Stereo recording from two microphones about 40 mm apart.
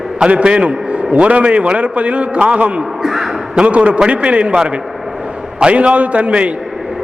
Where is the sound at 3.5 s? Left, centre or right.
Right.